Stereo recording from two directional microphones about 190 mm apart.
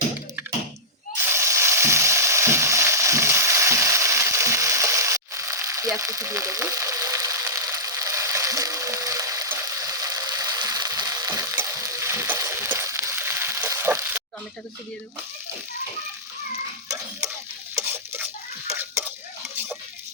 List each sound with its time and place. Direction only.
1.2 s frying: 15° right (ahead or behind)
17.7 s stir: 10° right (ahead or behind)
18.7 s a sound: 10° right (ahead or behind)